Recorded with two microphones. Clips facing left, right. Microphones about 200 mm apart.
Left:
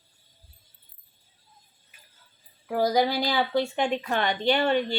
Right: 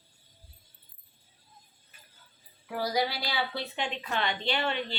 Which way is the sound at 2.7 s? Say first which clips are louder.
Left 7 dB; 45° left (ahead or behind).